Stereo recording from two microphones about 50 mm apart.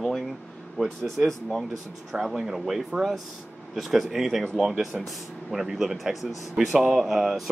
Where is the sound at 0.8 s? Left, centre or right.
Left.